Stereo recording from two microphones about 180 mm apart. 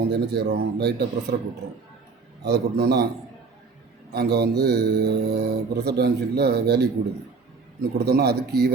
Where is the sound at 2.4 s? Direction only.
65° right (ahead or behind).